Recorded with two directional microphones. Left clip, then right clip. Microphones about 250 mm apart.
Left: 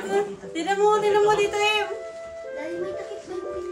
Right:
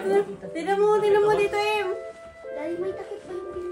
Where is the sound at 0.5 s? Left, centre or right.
Centre.